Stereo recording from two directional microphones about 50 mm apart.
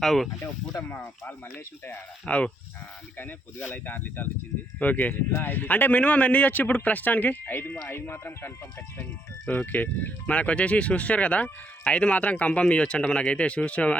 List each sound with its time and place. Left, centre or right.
0.0 s speech: centre
0.4 s speech: left
0.9 s speech: left
3.7 s speech: left
9.5 s speech: left